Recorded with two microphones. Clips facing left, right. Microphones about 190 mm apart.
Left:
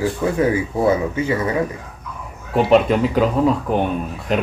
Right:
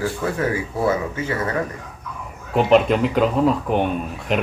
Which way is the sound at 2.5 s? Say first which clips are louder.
Left 1 dB; centre (ahead or behind).